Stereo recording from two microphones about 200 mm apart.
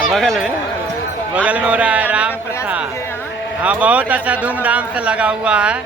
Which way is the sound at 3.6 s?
5° right (ahead or behind).